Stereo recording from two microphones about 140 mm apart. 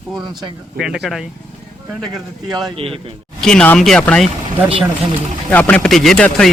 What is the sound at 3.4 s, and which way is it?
Speech, 10° left (ahead or behind).